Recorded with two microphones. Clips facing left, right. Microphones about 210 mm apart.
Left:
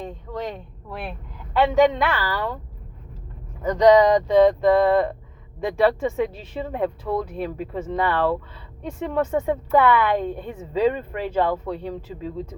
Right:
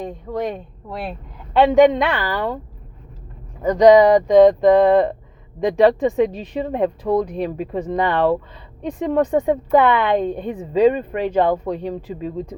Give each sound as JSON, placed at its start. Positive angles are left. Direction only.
{"t": 0.5, "sound": "speech", "side_deg": -40}
{"t": 1.5, "sound": "a woman's voice", "side_deg": -15}
{"t": 3.6, "sound": "a woman's voice", "side_deg": -10}